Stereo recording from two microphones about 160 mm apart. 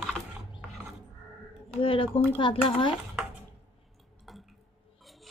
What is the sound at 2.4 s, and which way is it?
Speech, 30° left (ahead or behind).